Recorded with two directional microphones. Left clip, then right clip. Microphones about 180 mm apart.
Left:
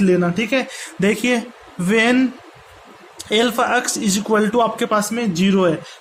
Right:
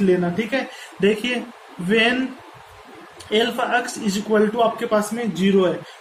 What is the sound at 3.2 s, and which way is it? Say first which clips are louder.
Speech: left 3 dB; 60° left (ahead or behind).